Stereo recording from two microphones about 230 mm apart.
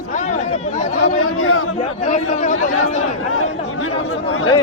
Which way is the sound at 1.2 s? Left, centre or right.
Left.